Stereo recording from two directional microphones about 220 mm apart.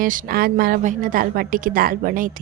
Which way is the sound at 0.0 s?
40° right (ahead or behind).